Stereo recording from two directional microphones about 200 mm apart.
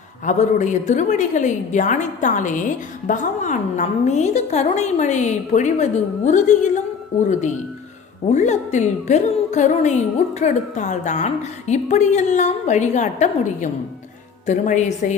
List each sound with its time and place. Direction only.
0.3 s a woman's voice: 35° left (ahead or behind)
8.3 s a woman's voice: 35° left (ahead or behind)